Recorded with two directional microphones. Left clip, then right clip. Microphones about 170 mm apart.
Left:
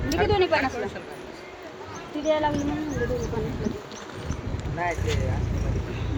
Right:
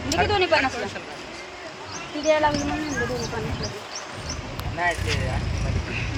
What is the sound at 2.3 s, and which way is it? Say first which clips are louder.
Speech: right 4 dB; 15° right (ahead or behind).